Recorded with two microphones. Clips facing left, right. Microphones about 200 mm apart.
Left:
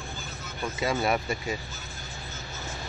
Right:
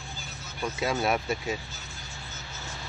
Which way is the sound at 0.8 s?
Centre (ahead or behind).